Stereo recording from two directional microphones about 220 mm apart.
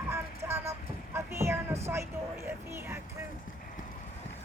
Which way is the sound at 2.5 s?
10° right (ahead or behind).